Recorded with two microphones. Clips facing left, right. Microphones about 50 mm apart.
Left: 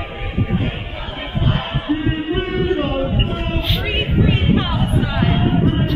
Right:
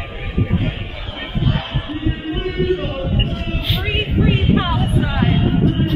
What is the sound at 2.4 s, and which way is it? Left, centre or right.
Music, left.